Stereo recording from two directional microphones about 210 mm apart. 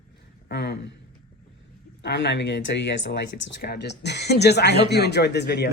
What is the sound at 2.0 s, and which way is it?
Speech, 55° left (ahead or behind).